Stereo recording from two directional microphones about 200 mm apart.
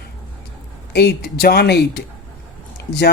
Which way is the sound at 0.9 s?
50° left (ahead or behind).